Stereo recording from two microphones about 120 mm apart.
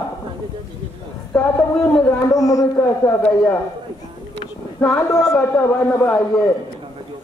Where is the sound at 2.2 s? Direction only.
30° left (ahead or behind).